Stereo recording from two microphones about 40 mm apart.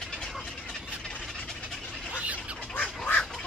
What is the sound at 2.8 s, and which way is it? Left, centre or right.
Duck, left.